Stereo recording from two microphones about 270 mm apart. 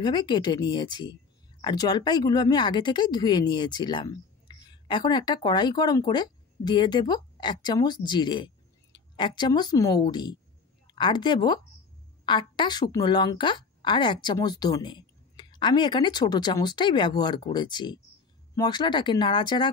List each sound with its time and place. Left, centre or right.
0.0 s speech: centre